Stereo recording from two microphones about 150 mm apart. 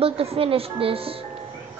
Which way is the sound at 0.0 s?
40° right (ahead or behind).